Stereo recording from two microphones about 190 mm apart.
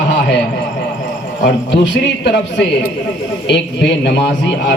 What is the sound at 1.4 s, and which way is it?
Speech, 60° left (ahead or behind).